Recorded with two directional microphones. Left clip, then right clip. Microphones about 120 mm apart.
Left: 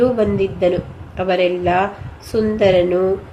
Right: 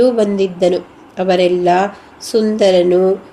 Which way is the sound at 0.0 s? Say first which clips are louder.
Right 3 dB; 40° right (ahead or behind).